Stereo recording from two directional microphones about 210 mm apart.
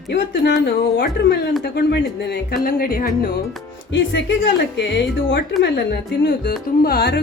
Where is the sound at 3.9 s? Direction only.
60° left (ahead or behind).